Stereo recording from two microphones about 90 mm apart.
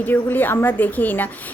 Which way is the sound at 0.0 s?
20° left (ahead or behind).